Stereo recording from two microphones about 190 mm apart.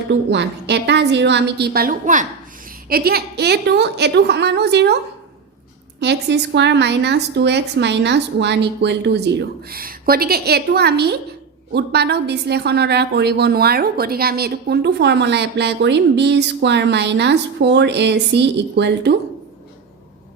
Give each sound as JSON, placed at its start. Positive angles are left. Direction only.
{"t": 0.1, "sound": "a woman's voice", "side_deg": -65}
{"t": 6.0, "sound": "a woman's voice", "side_deg": -65}